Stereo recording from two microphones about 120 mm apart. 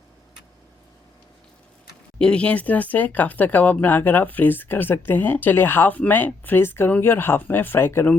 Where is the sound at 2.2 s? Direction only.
10° left (ahead or behind).